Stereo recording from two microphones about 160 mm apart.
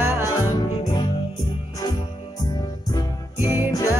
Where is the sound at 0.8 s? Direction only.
25° left (ahead or behind).